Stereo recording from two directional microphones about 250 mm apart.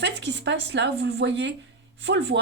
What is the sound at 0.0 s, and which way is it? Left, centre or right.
Speech, right.